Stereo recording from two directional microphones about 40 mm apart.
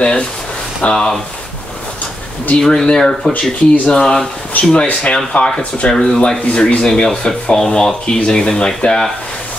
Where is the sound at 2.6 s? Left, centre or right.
Centre.